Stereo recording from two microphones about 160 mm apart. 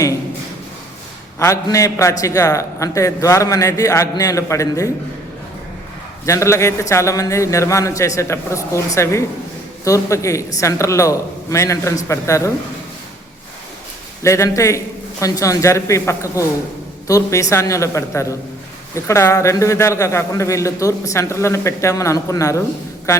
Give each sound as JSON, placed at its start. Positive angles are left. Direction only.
{"t": 1.4, "sound": "a man's voice", "side_deg": 20}
{"t": 6.2, "sound": "a man's voice", "side_deg": 20}
{"t": 14.2, "sound": "a man's voice", "side_deg": 20}